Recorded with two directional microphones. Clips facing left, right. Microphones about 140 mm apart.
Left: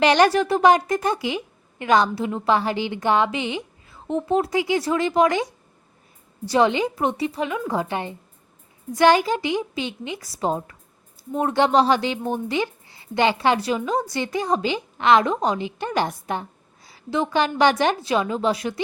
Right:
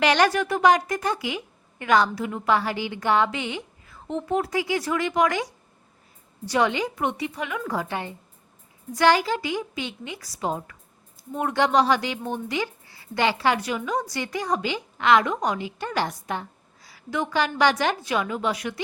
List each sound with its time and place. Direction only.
0.0 s a woman's voice: 25° left (ahead or behind)